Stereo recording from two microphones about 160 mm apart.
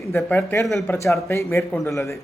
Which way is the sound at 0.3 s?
15° left (ahead or behind).